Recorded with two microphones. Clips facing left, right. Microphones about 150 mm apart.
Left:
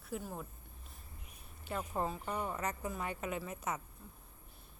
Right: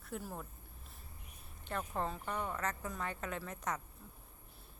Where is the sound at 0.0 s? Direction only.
Centre (ahead or behind).